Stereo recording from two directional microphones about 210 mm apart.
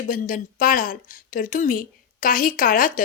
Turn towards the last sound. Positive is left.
turn(degrees=40)  # may be behind; listen again after turning